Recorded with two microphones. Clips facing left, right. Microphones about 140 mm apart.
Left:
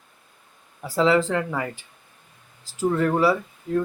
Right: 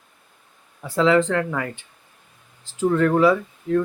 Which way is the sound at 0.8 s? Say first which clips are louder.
Right 2 dB; 10° left (ahead or behind).